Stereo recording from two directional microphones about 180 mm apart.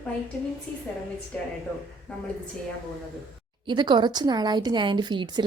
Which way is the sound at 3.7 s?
25° right (ahead or behind).